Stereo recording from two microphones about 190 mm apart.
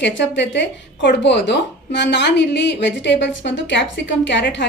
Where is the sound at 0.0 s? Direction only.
65° left (ahead or behind).